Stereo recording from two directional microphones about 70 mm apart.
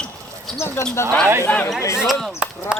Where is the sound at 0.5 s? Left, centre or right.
Left.